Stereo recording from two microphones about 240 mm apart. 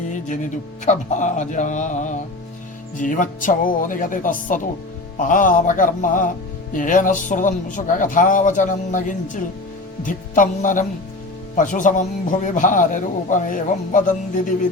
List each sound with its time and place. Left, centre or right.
0.9 s a man's voice: left